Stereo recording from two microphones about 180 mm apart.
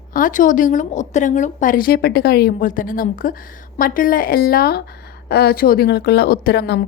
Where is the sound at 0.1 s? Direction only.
45° left (ahead or behind).